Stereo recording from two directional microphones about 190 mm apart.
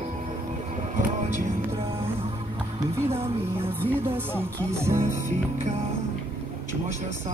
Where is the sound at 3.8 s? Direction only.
10° right (ahead or behind).